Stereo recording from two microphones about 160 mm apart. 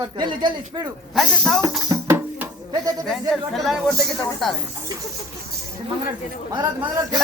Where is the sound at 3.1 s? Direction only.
Centre (ahead or behind).